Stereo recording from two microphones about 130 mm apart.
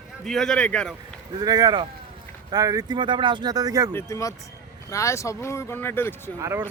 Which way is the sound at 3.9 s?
25° left (ahead or behind).